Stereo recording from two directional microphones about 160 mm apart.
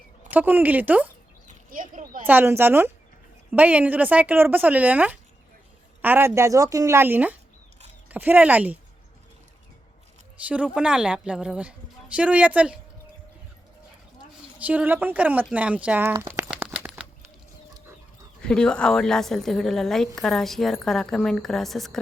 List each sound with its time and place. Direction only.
0.3 s speech: 10° right (ahead or behind)
1.7 s a sound: 55° right (ahead or behind)
2.2 s speech: 10° right (ahead or behind)
10.3 s speech: 10° right (ahead or behind)
14.6 s speech: 10° right (ahead or behind)
16.5 s a sound: 5° right (ahead or behind)
18.4 s a woman's voice: 5° left (ahead or behind)